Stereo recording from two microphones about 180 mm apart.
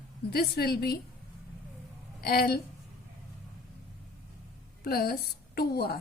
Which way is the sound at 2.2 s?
60° left (ahead or behind).